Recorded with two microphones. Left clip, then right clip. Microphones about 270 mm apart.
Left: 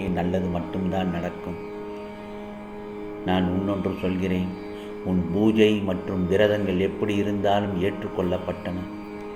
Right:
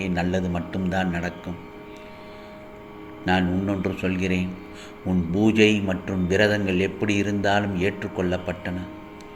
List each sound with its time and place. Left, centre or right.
0.0 s a man's voice: centre
3.2 s a man's voice: centre